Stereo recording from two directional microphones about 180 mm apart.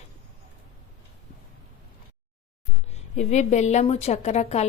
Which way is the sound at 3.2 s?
40° left (ahead or behind).